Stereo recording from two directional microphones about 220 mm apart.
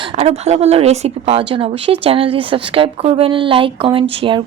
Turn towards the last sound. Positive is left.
turn(degrees=-25)  # may be behind; listen again after turning